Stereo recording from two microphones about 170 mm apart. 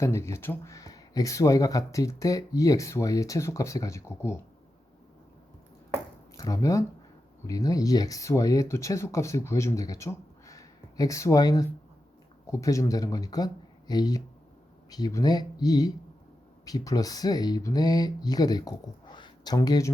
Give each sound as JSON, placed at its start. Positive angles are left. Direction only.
{"t": 0.0, "sound": "speech", "side_deg": 15}
{"t": 6.3, "sound": "speech", "side_deg": 20}